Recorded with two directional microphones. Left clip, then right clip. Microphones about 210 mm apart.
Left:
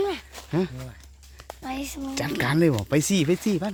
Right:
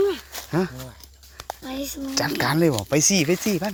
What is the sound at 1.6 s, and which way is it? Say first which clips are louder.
Speech: even; 15° left (ahead or behind).